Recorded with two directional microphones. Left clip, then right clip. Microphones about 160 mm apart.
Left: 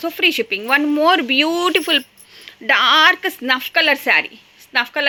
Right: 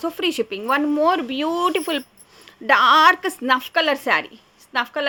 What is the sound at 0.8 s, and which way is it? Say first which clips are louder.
Speech: left 4 dB; 15° left (ahead or behind).